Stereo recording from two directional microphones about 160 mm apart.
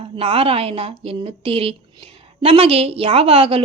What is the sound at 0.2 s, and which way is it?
A woman's voice, 35° right (ahead or behind).